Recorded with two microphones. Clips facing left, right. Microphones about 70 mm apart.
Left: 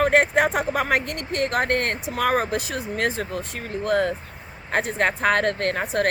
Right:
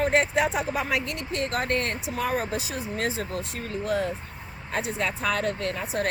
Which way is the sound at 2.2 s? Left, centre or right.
Left.